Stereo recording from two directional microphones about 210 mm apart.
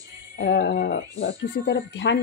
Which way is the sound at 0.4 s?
55° left (ahead or behind).